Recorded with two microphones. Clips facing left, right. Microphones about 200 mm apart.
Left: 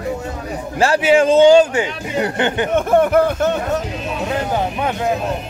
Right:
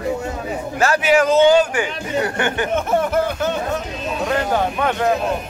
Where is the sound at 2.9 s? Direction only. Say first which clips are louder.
Left 7 dB; 60° left (ahead or behind).